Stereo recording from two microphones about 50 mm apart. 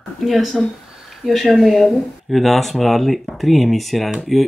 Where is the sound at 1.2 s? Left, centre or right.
Centre.